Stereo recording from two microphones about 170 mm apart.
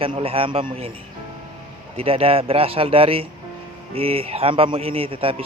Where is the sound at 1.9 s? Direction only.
35° right (ahead or behind).